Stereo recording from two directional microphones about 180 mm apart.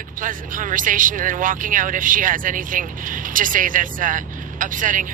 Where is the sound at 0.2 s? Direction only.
50° right (ahead or behind).